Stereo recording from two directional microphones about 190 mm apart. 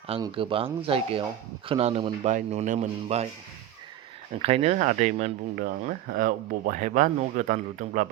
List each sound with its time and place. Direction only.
0.1 s speech: 30° right (ahead or behind)
4.4 s speech: 35° right (ahead or behind)